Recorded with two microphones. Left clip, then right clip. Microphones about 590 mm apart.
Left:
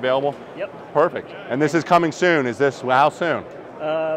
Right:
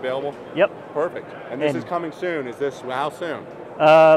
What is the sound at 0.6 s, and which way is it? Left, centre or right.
Speech, right.